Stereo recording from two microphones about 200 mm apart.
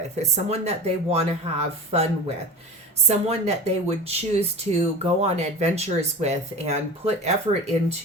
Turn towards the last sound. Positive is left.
turn(degrees=-35)  # may be behind; listen again after turning